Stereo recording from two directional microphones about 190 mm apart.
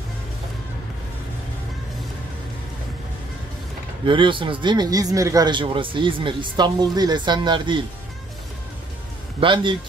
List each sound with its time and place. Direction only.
4.0 s speech: 25° right (ahead or behind)
9.4 s speech: 25° right (ahead or behind)